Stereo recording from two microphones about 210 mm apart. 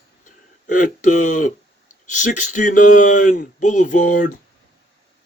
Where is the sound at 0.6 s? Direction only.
40° left (ahead or behind).